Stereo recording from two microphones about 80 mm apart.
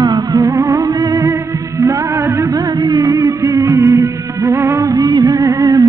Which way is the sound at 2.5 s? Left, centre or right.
Right.